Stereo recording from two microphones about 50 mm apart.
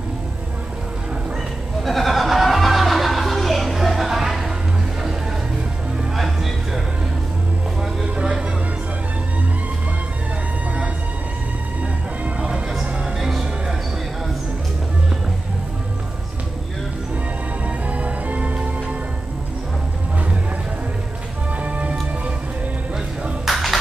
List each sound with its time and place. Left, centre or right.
1.8 s music: centre
6.1 s music: centre
8.0 s a sound: centre
12.4 s music: right
13.2 s music: centre
17.6 s music: right
21.6 s music: right
23.4 s a sound: centre